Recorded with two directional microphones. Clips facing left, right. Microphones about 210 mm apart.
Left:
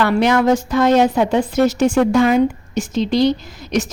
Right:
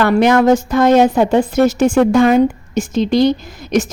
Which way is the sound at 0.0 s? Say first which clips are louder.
Right 3 dB; 50° right (ahead or behind).